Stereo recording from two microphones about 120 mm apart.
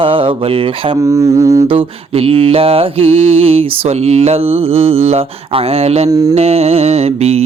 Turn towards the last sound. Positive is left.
turn(degrees=-60)  # may be behind; listen again after turning